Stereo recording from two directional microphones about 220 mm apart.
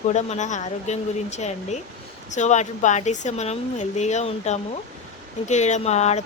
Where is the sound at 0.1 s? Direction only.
30° left (ahead or behind).